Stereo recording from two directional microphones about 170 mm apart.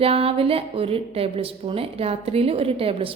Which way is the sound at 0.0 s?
35° right (ahead or behind).